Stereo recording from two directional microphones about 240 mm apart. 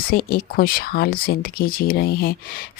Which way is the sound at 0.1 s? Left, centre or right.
Left.